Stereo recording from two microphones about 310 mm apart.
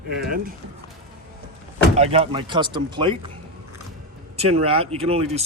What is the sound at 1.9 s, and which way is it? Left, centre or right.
Speech, centre.